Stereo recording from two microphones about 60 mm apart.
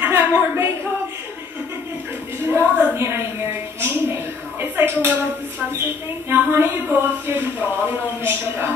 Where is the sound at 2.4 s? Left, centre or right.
Right.